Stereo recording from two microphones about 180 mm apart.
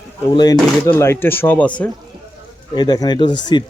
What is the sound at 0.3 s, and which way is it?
Speech, 25° left (ahead or behind).